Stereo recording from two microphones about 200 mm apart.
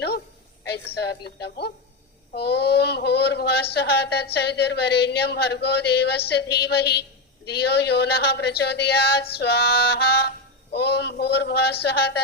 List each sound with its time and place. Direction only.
0.9 s speech: 55° left (ahead or behind)
9.4 s music: 55° left (ahead or behind)